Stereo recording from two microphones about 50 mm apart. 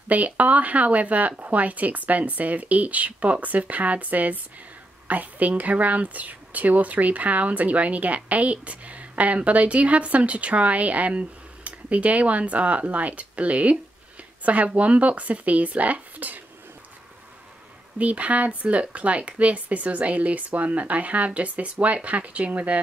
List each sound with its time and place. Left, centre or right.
0.1 s speech: right
17.9 s speech: right